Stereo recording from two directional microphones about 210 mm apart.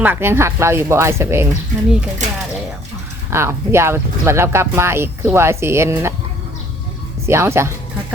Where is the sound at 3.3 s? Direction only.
10° right (ahead or behind).